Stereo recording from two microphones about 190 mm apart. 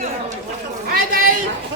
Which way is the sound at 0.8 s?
50° right (ahead or behind).